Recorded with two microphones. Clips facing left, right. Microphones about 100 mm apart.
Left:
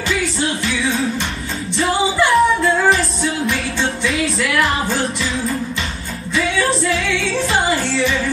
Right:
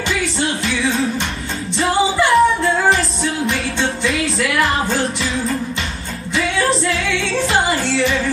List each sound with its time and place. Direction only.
1.8 s music: centre (ahead or behind)
4.1 s music: centre (ahead or behind)
6.3 s music: 30° right (ahead or behind)